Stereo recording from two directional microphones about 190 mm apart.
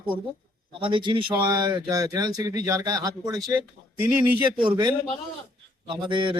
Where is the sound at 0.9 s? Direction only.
25° right (ahead or behind).